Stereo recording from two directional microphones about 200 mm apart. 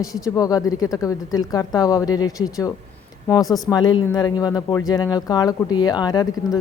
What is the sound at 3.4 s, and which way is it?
Speech, centre (ahead or behind).